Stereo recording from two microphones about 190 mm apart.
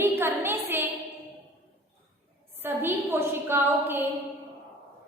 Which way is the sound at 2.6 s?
10° right (ahead or behind).